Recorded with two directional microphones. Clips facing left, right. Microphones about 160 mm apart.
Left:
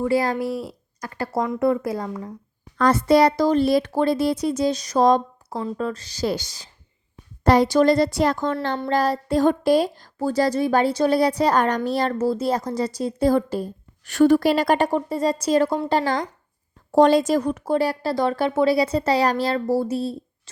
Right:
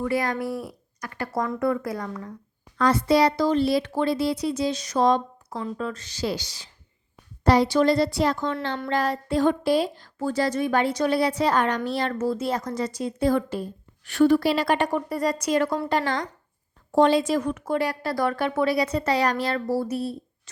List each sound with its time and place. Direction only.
0.0 s speech: 30° left (ahead or behind)
2.7 s speech: 50° left (ahead or behind); by 20.1 s 25° left (ahead or behind)